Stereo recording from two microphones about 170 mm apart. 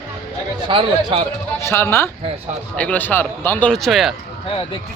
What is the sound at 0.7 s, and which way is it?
Speech, 30° right (ahead or behind).